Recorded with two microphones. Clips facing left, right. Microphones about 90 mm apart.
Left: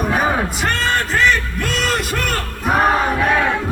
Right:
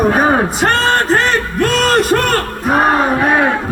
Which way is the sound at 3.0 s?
35° right (ahead or behind).